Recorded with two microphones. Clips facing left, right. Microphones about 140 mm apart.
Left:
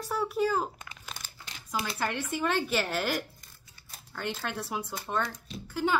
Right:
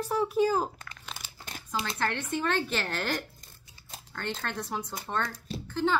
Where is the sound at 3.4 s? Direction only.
20° right (ahead or behind).